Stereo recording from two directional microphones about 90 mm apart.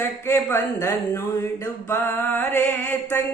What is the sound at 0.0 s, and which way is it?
Speech, 25° left (ahead or behind).